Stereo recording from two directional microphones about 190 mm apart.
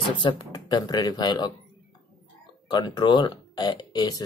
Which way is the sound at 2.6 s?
20° left (ahead or behind).